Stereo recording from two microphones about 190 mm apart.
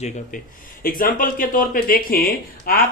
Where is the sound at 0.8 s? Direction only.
45° left (ahead or behind).